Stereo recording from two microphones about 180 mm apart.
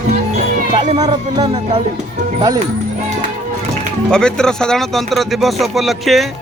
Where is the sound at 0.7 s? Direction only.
25° right (ahead or behind).